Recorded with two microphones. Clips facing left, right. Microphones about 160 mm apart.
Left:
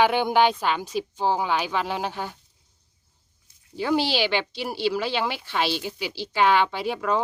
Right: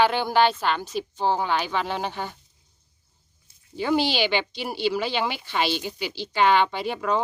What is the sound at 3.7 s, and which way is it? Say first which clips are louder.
Speech: even; centre (ahead or behind).